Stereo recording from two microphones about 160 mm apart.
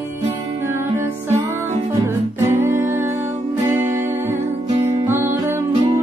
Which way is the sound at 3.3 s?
45° right (ahead or behind).